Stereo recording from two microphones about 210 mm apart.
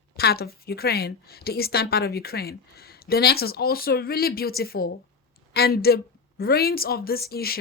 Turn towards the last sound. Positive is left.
turn(degrees=45)  # may be behind; listen again after turning